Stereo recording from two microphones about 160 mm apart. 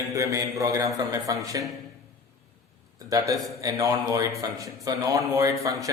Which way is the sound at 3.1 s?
20° right (ahead or behind).